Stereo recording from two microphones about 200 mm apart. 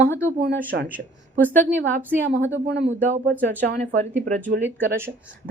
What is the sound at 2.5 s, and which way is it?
Speech, 60° right (ahead or behind).